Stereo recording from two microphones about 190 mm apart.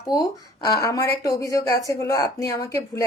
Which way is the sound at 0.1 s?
20° left (ahead or behind).